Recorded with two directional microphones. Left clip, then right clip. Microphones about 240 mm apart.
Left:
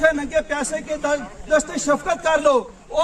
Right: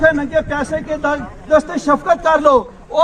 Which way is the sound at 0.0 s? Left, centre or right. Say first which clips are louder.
Right 5 dB; left.